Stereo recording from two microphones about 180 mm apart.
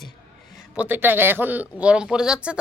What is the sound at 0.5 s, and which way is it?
Speech, 10° right (ahead or behind).